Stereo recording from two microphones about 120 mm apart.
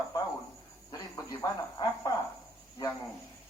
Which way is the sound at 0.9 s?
35° left (ahead or behind).